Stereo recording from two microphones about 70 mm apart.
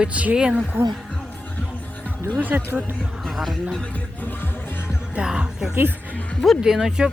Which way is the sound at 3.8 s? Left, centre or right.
Left.